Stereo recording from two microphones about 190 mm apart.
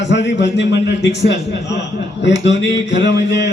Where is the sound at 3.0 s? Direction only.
65° left (ahead or behind).